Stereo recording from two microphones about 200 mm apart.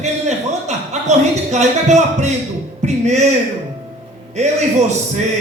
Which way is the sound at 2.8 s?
35° right (ahead or behind).